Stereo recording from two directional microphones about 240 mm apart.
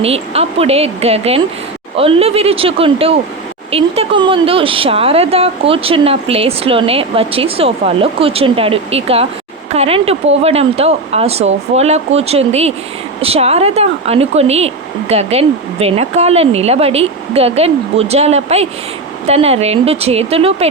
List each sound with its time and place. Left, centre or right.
0.0 s speech: right